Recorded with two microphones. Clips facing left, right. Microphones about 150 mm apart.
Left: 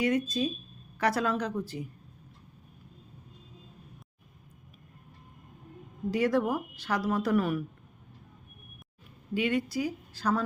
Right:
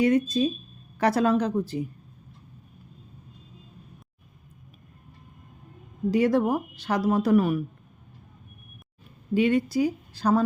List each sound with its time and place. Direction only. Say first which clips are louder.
0.0 s speech: right 6 dB; 25° right (ahead or behind)
6.1 s speech: right 5 dB; 20° right (ahead or behind)
9.3 s speech: right 7 dB; 30° right (ahead or behind)